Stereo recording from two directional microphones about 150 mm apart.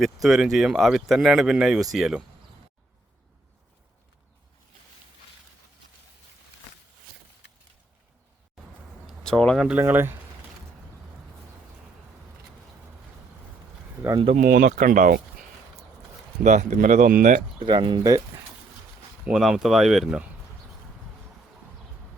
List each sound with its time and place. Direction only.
0.0 s speech: centre (ahead or behind)
9.0 s a sound: 5° left (ahead or behind)
9.6 s speech: 10° right (ahead or behind)
14.3 s speech: 60° right (ahead or behind)
16.4 s speech: 50° right (ahead or behind)
17.7 s speech: 30° right (ahead or behind)
19.2 s speech: 5° right (ahead or behind)